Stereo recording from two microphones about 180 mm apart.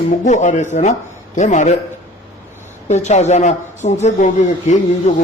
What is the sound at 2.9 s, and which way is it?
A man's voice, 40° left (ahead or behind).